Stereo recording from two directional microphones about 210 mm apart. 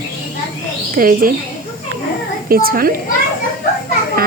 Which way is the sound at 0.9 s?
40° right (ahead or behind).